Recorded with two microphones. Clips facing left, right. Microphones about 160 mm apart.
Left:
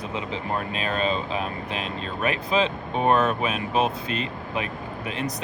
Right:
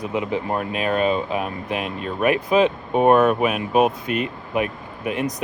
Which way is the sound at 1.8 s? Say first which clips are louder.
Right 4 dB; 25° left (ahead or behind).